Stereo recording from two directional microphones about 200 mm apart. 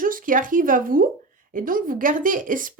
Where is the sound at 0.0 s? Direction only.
45° right (ahead or behind).